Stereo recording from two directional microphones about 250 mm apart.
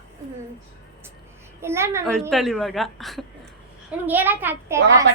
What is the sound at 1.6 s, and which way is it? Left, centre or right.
Speech, centre.